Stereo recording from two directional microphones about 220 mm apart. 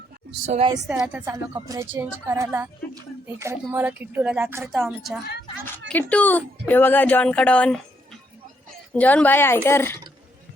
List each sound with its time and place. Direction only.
0.5 s a woman's voice: 25° right (ahead or behind)
0.9 s a woman's voice: 5° right (ahead or behind); by 10.0 s 10° left (ahead or behind)